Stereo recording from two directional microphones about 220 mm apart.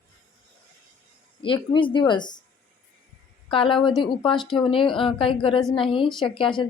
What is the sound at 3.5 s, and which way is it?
A woman's voice, 25° left (ahead or behind).